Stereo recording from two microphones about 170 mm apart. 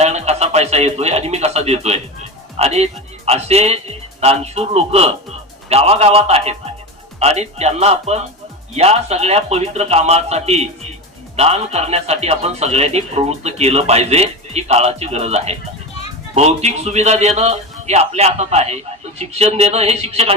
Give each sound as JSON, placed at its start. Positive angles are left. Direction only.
{"t": 0.0, "sound": "a man's voice", "side_deg": -40}